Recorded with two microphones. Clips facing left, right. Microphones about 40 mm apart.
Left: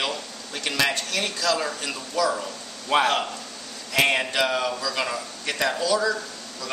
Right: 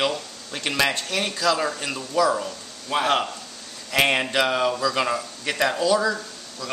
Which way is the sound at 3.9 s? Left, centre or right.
Centre.